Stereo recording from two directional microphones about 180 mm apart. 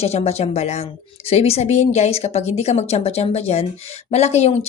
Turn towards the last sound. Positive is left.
turn(degrees=35)  # may be behind; listen again after turning